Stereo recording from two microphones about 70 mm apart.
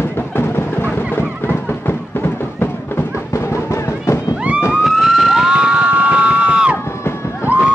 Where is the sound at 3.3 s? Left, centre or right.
Left.